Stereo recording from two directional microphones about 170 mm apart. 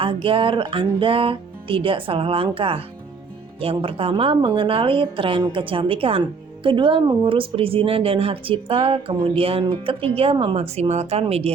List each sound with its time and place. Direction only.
0.0 s speech: 30° right (ahead or behind)